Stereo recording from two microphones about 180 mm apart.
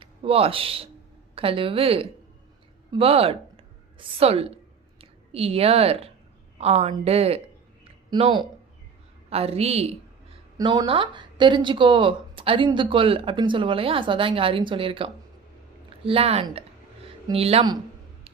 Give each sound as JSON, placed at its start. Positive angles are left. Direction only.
{"t": 0.0, "sound": "a woman's voice", "side_deg": -30}
{"t": 2.9, "sound": "a sound", "side_deg": -30}
{"t": 6.6, "sound": "a woman's voice", "side_deg": -35}